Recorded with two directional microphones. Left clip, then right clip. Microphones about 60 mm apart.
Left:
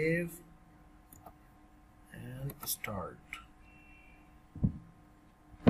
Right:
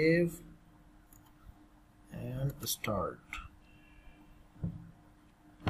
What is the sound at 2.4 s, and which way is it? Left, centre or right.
Speech, centre.